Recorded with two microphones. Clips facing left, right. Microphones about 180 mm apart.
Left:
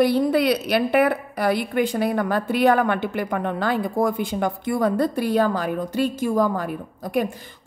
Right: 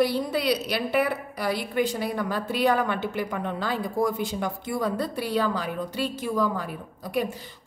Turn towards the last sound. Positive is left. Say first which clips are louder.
# left 4 dB
turn(degrees=50)  # may be behind; listen again after turning